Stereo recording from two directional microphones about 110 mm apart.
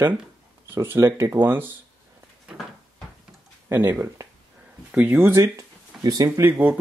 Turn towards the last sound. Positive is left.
turn(degrees=-20)  # may be behind; listen again after turning